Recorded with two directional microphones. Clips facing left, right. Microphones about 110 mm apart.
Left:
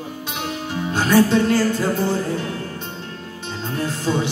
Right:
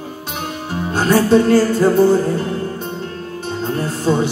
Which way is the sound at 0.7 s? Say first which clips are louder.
Right 3 dB; 40° right (ahead or behind).